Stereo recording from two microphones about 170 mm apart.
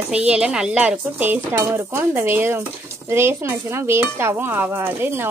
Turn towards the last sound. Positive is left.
turn(degrees=-15)  # may be behind; listen again after turning